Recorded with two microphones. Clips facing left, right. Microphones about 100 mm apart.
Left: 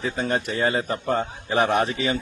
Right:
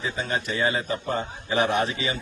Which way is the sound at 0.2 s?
50° left (ahead or behind).